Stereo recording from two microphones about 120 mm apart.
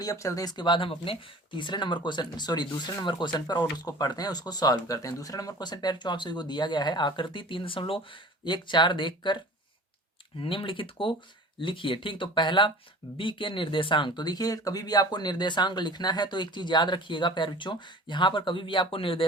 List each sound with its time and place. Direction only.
0.0 s speech: 25° left (ahead or behind); by 9.4 s 40° left (ahead or behind)
10.4 s speech: 45° left (ahead or behind)